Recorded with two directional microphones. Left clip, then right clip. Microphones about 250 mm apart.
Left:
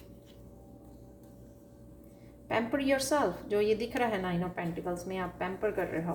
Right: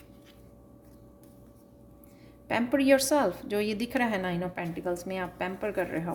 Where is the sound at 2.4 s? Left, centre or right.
Right.